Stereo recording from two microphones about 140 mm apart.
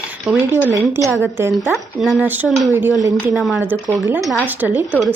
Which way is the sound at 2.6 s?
20° right (ahead or behind).